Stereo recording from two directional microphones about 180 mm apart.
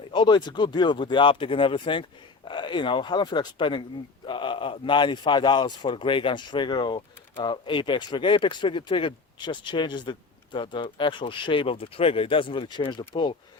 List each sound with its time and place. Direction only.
0.1 s speech: 25° left (ahead or behind)